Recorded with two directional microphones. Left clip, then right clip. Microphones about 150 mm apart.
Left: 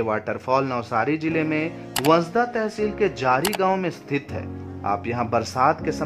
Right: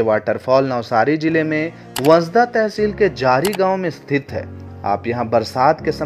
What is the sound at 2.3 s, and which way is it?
Speech, 25° right (ahead or behind).